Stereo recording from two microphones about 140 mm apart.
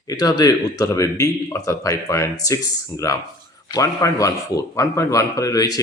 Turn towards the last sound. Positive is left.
turn(degrees=25)  # may be behind; listen again after turning